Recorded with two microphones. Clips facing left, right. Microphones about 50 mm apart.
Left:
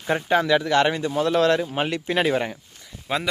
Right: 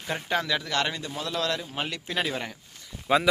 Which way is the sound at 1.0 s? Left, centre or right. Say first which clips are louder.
Left 10 dB; left.